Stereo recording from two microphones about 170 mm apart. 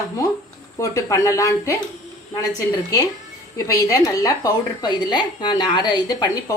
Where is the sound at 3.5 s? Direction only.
20° left (ahead or behind).